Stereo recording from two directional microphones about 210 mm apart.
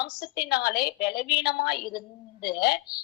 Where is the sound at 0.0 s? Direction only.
50° left (ahead or behind).